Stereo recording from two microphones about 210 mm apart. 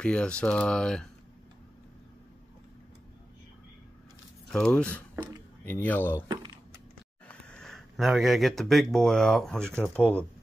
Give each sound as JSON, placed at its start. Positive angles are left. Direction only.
{"t": 0.0, "sound": "speech", "side_deg": 5}
{"t": 4.5, "sound": "speech", "side_deg": 0}
{"t": 5.1, "sound": "a sound", "side_deg": -10}
{"t": 5.7, "sound": "speech", "side_deg": 10}
{"t": 6.2, "sound": "speech", "side_deg": -20}
{"t": 7.2, "sound": "speech", "side_deg": 5}